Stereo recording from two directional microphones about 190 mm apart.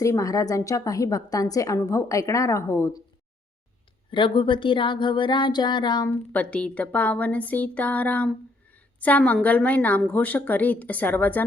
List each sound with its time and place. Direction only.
0.0 s a woman's voice: 15° left (ahead or behind)
4.1 s speech: 25° left (ahead or behind)
6.3 s a woman's voice: 5° left (ahead or behind)